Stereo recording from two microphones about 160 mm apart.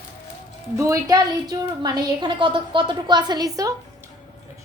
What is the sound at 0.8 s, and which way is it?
A woman's voice, 20° right (ahead or behind).